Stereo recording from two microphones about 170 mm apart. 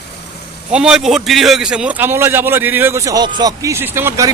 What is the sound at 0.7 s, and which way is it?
A man's voice, 5° right (ahead or behind).